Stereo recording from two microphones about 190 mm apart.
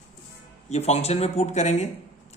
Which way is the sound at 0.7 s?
35° left (ahead or behind).